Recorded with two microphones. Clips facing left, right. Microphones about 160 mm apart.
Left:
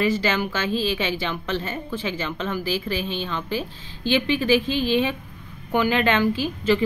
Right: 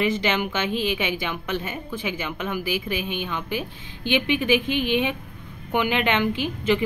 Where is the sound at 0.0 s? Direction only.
20° right (ahead or behind).